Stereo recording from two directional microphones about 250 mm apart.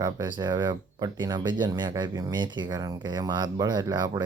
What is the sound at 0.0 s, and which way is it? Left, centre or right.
Speech, centre.